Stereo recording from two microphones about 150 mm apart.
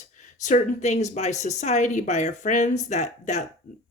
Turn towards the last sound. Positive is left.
turn(degrees=50)  # may be behind; listen again after turning